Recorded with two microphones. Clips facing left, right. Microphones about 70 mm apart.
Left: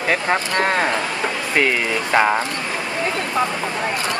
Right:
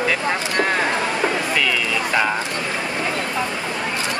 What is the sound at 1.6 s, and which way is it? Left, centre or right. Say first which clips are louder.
Speech: left 2 dB; left.